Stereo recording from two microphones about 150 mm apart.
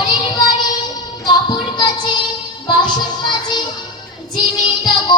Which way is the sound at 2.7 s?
30° left (ahead or behind).